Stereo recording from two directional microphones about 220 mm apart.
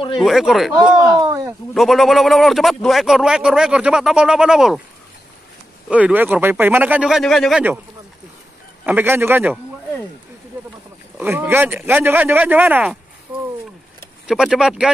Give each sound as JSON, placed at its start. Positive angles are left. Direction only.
{"t": 0.2, "sound": "speech", "side_deg": 0}
{"t": 1.2, "sound": "a sound", "side_deg": -15}
{"t": 1.7, "sound": "speech", "side_deg": 0}
{"t": 5.9, "sound": "speech", "side_deg": -5}
{"t": 8.8, "sound": "speech", "side_deg": -10}
{"t": 11.1, "sound": "speech", "side_deg": -10}
{"t": 14.2, "sound": "speech", "side_deg": -5}